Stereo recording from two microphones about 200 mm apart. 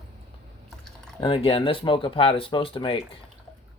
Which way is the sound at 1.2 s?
25° left (ahead or behind).